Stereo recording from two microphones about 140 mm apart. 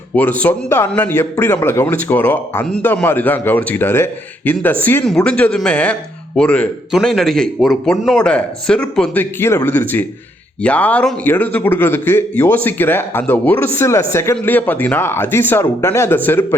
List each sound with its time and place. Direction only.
0.4 s a man's voice: 15° left (ahead or behind)